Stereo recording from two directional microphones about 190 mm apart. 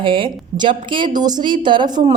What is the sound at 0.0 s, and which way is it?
A woman's voice, 25° right (ahead or behind).